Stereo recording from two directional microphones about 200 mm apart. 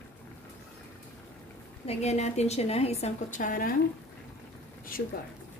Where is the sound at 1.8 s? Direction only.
35° left (ahead or behind).